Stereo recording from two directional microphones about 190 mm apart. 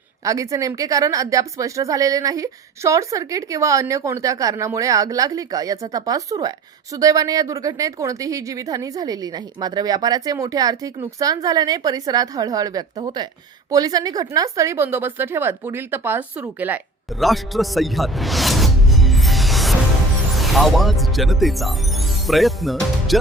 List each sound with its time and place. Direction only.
0.3 s speech: 15° right (ahead or behind); by 23.1 s centre (ahead or behind)